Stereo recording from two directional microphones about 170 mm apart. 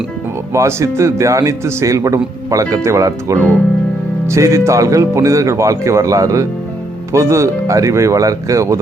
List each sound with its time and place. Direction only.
0.5 s speech: 15° right (ahead or behind)